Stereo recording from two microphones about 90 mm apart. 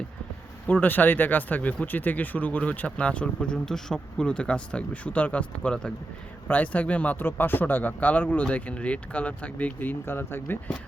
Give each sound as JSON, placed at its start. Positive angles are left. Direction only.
{"t": 0.7, "sound": "speech", "side_deg": 20}